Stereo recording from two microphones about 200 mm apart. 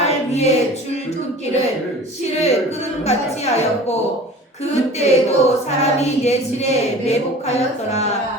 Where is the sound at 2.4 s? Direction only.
35° left (ahead or behind).